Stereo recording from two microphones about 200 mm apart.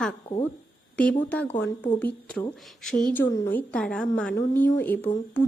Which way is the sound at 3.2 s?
15° left (ahead or behind).